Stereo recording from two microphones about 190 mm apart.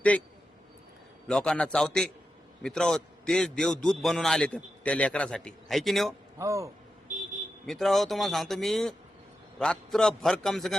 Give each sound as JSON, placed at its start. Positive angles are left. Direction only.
{"t": 0.1, "sound": "a man's voice", "side_deg": 5}
{"t": 1.3, "sound": "a man's voice", "side_deg": 5}
{"t": 6.4, "sound": "a man's voice", "side_deg": -15}
{"t": 7.7, "sound": "a man's voice", "side_deg": 0}